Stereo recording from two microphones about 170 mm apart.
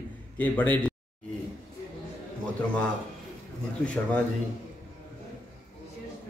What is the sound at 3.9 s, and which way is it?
Speech, 10° left (ahead or behind).